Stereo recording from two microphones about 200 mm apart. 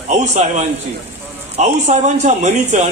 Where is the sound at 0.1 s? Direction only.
35° right (ahead or behind).